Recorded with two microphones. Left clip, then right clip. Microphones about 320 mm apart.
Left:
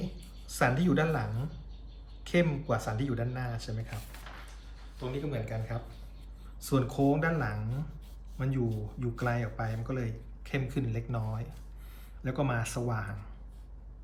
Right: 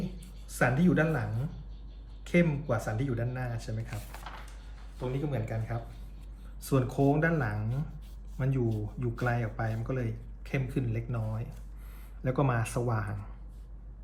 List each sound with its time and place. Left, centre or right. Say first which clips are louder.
0.6 s speech: right 1 dB; centre
2.2 s speech: right 1 dB; centre
5.3 s speech: right 1 dB; centre